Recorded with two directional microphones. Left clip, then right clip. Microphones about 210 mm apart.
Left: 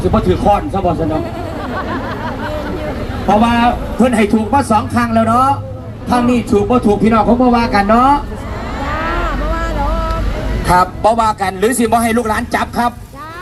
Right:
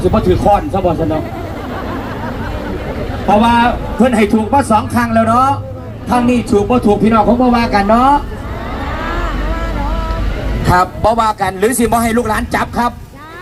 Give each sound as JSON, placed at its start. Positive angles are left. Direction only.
{"t": 0.1, "sound": "speech", "side_deg": -20}
{"t": 3.2, "sound": "a man's voice", "side_deg": -20}
{"t": 10.7, "sound": "a man's voice", "side_deg": -15}